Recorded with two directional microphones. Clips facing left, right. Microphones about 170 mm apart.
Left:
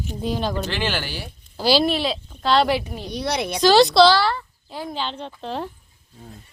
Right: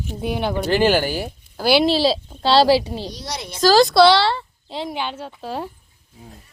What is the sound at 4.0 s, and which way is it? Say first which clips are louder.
Speech: right 4 dB; 70° right (ahead or behind).